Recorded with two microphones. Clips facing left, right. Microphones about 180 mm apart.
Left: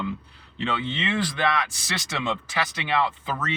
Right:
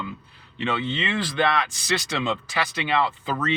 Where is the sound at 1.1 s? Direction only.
25° right (ahead or behind).